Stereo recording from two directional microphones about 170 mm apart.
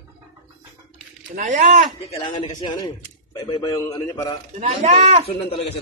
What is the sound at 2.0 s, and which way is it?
A man's voice, 30° left (ahead or behind).